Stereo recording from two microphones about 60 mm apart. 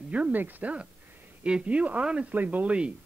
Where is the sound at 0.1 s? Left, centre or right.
Right.